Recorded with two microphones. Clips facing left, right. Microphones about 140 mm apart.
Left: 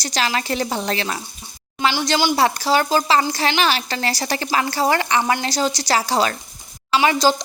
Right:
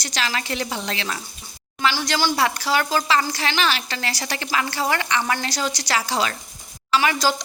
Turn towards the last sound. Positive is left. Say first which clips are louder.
# left 4 dB
turn(degrees=25)  # may be behind; listen again after turning